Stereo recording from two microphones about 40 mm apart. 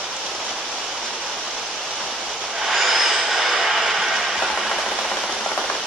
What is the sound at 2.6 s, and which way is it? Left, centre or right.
Vehicle, centre.